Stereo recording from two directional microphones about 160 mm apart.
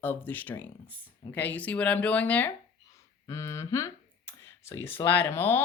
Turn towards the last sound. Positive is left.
turn(degrees=15)  # may be behind; listen again after turning